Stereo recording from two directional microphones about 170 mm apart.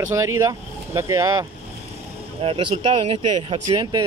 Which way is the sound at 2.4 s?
35° right (ahead or behind).